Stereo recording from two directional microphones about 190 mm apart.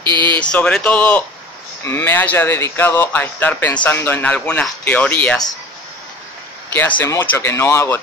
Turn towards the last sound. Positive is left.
turn(degrees=15)  # may be behind; listen again after turning